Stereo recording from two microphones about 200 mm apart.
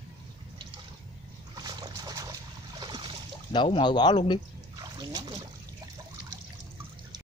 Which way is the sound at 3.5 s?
25° left (ahead or behind).